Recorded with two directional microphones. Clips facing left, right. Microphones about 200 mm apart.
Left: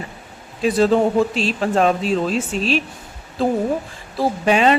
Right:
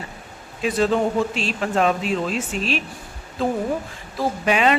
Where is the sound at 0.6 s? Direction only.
35° left (ahead or behind).